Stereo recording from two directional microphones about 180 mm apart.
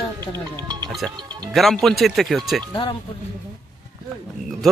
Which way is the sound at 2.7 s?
25° left (ahead or behind).